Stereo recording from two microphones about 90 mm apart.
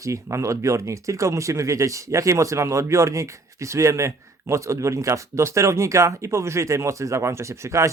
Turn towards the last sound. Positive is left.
turn(degrees=-35)  # may be behind; listen again after turning